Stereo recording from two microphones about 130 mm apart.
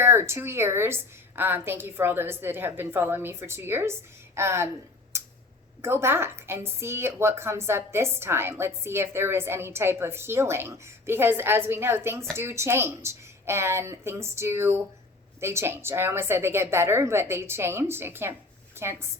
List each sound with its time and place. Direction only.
0.0 s a woman's voice: 20° right (ahead or behind)
5.1 s clicking: 20° right (ahead or behind)
5.8 s a woman's voice: 20° right (ahead or behind)